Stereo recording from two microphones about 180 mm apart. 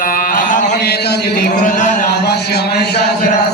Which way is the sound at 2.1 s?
65° left (ahead or behind).